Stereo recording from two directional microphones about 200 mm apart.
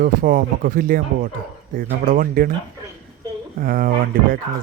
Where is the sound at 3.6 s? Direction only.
45° right (ahead or behind).